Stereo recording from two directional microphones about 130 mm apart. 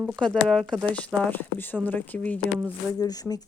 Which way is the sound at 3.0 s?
30° left (ahead or behind).